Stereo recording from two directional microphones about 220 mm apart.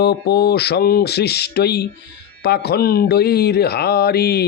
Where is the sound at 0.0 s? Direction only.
45° left (ahead or behind).